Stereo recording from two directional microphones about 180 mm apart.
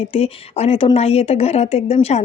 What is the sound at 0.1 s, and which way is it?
Speech, 35° left (ahead or behind).